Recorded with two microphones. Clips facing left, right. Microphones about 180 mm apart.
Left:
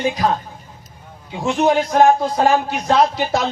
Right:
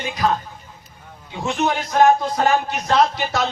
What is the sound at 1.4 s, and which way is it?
A man's voice, 35° left (ahead or behind).